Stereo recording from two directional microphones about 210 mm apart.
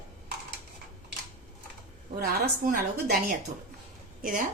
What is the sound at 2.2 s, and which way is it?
Speech, 45° right (ahead or behind).